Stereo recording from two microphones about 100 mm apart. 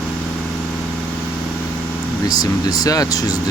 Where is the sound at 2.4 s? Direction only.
40° left (ahead or behind).